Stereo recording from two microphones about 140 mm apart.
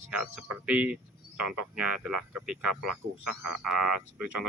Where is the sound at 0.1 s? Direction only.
5° right (ahead or behind).